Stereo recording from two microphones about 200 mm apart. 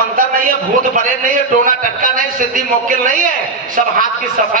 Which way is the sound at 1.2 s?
40° right (ahead or behind).